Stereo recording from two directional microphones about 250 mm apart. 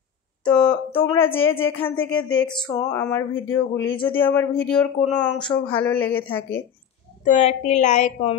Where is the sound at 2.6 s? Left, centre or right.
Centre.